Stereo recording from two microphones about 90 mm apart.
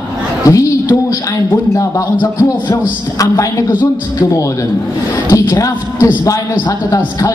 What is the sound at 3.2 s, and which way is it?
A man's voice, 35° left (ahead or behind).